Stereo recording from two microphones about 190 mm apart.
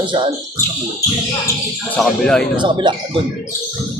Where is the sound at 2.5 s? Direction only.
25° right (ahead or behind).